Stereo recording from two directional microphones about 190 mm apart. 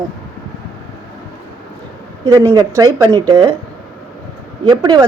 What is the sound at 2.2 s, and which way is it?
Speech, 15° right (ahead or behind).